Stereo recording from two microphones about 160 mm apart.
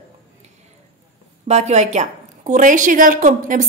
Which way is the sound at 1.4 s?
45° right (ahead or behind).